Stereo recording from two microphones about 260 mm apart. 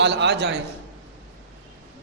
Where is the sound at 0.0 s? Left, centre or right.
Right.